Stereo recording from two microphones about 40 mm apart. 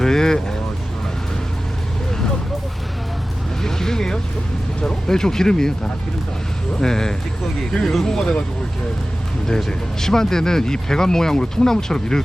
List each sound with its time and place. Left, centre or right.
0.0 s vehicle: centre
3.6 s vehicle: centre
4.8 s speech: centre
6.7 s speech: centre
9.5 s speech: centre